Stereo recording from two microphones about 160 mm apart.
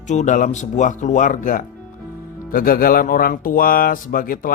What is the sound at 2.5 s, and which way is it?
Speech, 65° left (ahead or behind).